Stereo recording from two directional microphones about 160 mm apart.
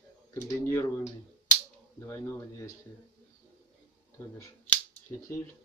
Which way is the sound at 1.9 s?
20° left (ahead or behind).